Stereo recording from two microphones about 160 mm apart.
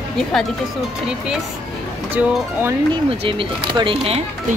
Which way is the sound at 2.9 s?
35° right (ahead or behind).